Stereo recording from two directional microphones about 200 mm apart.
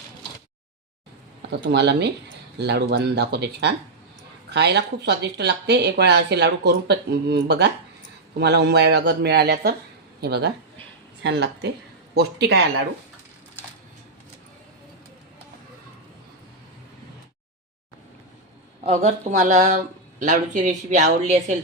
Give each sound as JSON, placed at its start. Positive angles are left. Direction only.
{"t": 1.4, "sound": "speech", "side_deg": -60}
{"t": 18.8, "sound": "speech", "side_deg": -35}